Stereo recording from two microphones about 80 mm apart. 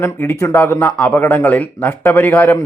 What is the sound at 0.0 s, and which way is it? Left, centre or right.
Speech, left.